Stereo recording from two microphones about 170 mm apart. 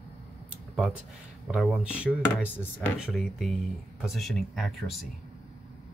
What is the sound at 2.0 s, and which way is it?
Speech, 10° left (ahead or behind).